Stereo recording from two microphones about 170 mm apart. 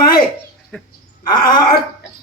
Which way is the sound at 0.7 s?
5° left (ahead or behind).